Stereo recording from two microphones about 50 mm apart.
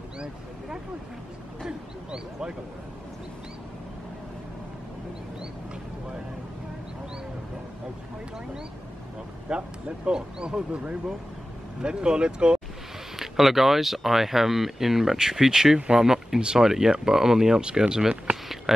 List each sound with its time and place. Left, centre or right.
1.7 s speech: centre
9.5 s speech: right
11.8 s speech: centre
13.1 s speech: centre